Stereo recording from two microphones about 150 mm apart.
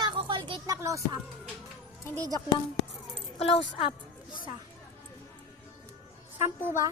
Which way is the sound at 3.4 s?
40° left (ahead or behind).